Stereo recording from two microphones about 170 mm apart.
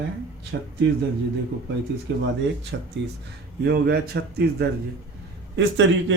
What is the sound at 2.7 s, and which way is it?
Speech, 90° right.